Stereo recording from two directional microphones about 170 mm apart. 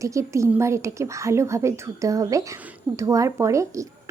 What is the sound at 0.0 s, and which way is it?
A woman's voice, 20° right (ahead or behind).